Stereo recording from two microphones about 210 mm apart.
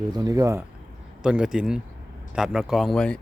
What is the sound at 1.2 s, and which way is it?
A man's voice, 5° right (ahead or behind).